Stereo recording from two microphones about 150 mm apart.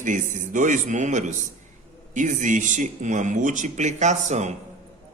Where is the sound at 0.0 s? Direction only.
55° right (ahead or behind).